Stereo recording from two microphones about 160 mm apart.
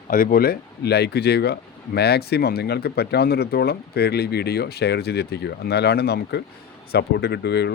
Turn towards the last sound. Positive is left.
turn(degrees=90)